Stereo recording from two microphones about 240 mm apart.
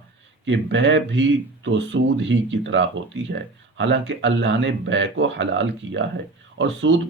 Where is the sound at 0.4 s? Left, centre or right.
Right.